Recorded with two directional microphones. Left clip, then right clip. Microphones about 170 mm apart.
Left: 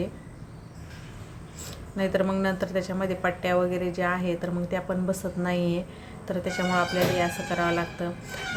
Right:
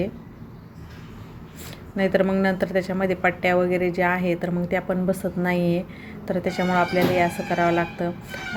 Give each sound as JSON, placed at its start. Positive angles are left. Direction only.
{"t": 2.0, "sound": "speech", "side_deg": -20}